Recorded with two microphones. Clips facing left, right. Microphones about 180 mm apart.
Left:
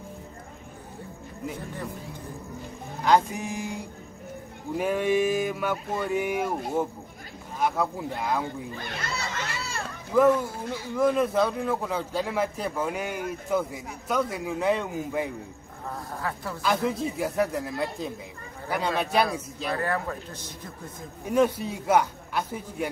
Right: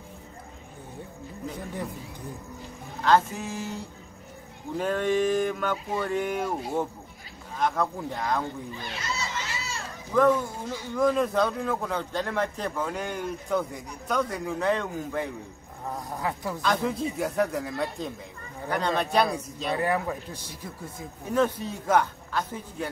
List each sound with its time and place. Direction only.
3.0 s a man's voice: 15° left (ahead or behind)
7.5 s a man's voice: 10° left (ahead or behind)
8.9 s children playing: 55° left (ahead or behind)
10.1 s speech: 5° left (ahead or behind)
16.2 s a man's voice: 15° right (ahead or behind)
16.6 s speech: centre (ahead or behind)
19.7 s a man's voice: 15° right (ahead or behind)
21.3 s a man's voice: 10° left (ahead or behind)